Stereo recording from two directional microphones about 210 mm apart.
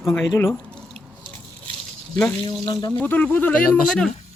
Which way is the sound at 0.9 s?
25° right (ahead or behind).